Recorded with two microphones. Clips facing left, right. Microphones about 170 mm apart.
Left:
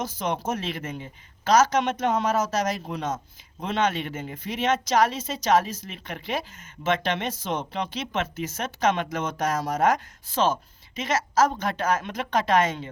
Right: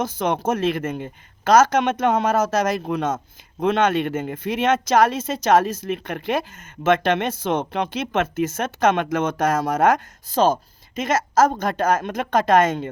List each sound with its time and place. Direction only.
0.0 s speech: 55° right (ahead or behind)
10.3 s speech: 40° right (ahead or behind)